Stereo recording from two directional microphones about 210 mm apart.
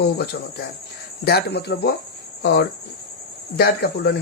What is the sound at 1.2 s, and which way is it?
Speech, 50° left (ahead or behind).